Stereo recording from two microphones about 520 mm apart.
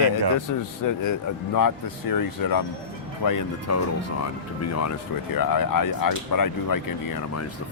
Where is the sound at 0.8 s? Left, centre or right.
Left.